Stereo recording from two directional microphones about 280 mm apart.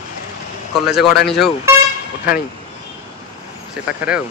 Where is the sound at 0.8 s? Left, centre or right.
Centre.